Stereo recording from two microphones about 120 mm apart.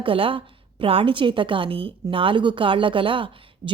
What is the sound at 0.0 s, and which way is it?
A woman's voice, 50° right (ahead or behind).